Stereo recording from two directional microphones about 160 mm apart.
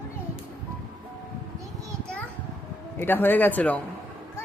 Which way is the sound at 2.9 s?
15° left (ahead or behind).